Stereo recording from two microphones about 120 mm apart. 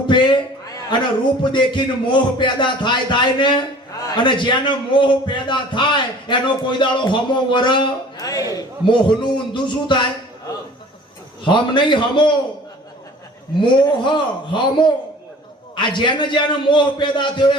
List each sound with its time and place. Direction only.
0.1 s a man's voice: 40° left (ahead or behind)
8.9 s a man's voice: 40° left (ahead or behind)
11.4 s a man's voice: 40° left (ahead or behind)
13.6 s a man's voice: 40° left (ahead or behind)